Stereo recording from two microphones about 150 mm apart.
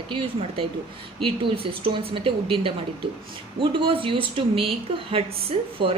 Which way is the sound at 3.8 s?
35° right (ahead or behind).